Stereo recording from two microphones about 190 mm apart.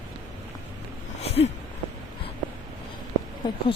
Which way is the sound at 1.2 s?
35° left (ahead or behind).